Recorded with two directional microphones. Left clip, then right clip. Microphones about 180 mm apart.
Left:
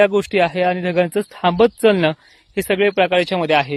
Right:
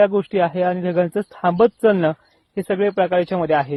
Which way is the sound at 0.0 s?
30° left (ahead or behind).